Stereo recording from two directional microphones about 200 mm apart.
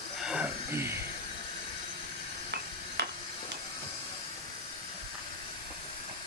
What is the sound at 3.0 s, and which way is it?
Hammer, 55° right (ahead or behind).